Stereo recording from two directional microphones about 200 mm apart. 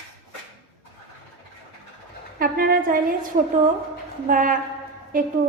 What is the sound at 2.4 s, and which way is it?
Speech, 45° right (ahead or behind).